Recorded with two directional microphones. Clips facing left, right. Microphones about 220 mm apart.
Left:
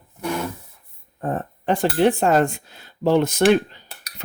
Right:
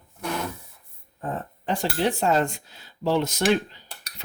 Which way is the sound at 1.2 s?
55° left (ahead or behind).